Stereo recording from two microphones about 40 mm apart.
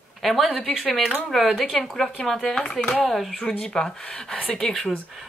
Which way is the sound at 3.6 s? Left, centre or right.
Centre.